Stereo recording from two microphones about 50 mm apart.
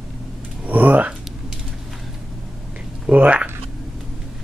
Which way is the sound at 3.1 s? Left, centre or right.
Right.